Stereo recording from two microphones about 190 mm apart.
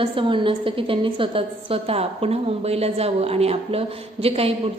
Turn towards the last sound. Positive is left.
turn(degrees=-30)  # may be behind; listen again after turning